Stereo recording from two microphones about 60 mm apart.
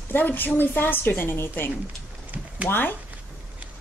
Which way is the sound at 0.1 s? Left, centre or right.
Left.